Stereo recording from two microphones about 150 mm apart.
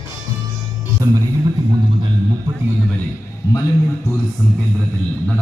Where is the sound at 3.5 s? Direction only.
20° left (ahead or behind).